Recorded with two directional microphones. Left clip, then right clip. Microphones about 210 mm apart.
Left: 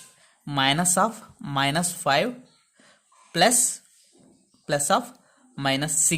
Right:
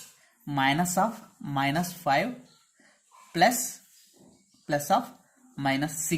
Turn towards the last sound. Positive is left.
turn(degrees=35)  # may be behind; listen again after turning